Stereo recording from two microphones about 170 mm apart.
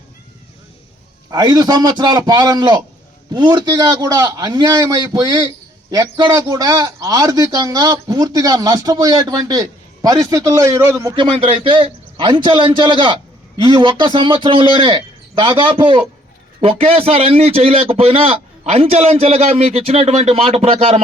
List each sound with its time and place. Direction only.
1.3 s a man's voice: 25° right (ahead or behind)
11.1 s a man's voice: 30° right (ahead or behind)